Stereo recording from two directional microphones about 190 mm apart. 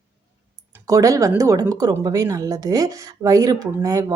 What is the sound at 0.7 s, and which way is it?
Speech, 15° right (ahead or behind).